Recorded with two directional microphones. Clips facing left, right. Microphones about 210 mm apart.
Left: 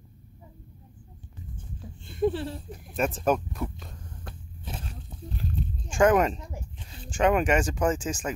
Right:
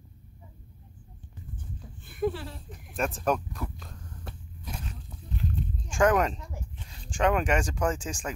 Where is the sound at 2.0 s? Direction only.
25° left (ahead or behind).